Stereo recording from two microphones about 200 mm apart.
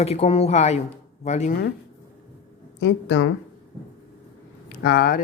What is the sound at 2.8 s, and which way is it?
Speech, 60° left (ahead or behind).